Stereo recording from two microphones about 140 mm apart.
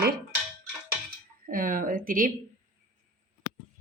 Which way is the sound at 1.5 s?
80° right.